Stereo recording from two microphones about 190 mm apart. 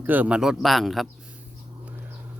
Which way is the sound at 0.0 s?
10° right (ahead or behind).